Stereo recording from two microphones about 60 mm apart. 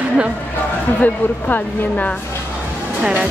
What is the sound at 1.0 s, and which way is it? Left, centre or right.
A woman's voice, left.